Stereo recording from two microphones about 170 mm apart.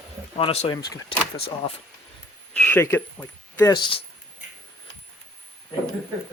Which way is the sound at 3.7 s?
30° left (ahead or behind).